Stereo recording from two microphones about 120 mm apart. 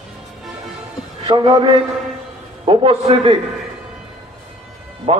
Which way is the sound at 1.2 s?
40° right (ahead or behind).